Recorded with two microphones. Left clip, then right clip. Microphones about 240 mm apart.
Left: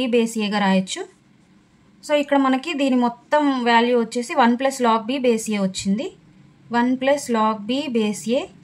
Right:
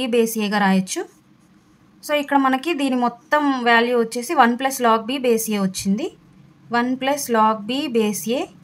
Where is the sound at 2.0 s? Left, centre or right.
Centre.